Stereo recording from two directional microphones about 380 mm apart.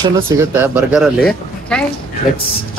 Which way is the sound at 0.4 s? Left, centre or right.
Centre.